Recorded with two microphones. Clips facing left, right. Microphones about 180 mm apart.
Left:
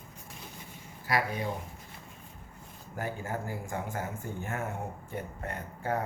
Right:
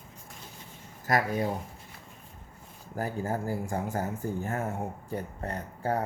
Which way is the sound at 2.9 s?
35° right (ahead or behind).